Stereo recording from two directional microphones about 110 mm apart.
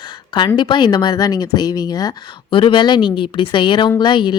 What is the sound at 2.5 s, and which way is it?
A woman's voice, 50° left (ahead or behind).